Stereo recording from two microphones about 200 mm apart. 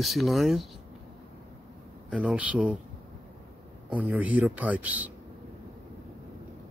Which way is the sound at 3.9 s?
5° right (ahead or behind).